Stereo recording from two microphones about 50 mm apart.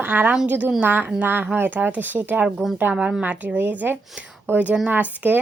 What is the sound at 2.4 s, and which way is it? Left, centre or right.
Speech, centre.